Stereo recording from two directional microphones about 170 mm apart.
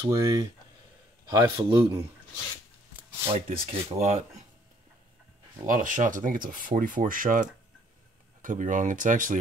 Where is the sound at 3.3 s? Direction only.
35° right (ahead or behind).